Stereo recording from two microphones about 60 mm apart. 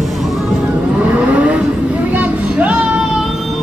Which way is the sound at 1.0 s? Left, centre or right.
Right.